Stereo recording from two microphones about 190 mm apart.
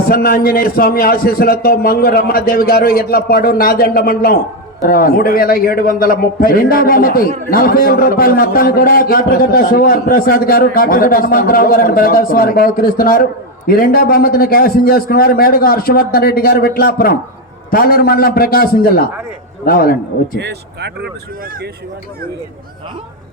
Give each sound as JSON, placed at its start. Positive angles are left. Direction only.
{"t": 0.1, "sound": "a man's voice", "side_deg": 50}
{"t": 20.4, "sound": "speech", "side_deg": -60}